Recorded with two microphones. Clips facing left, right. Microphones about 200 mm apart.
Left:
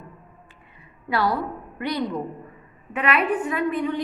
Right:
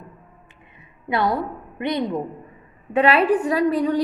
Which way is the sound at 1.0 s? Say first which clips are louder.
Right 2 dB; 20° right (ahead or behind).